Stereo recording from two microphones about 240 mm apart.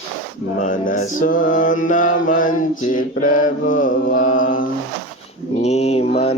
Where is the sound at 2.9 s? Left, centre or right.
Left.